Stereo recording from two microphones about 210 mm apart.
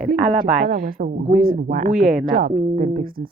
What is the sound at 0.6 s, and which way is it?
Speech, 40° right (ahead or behind).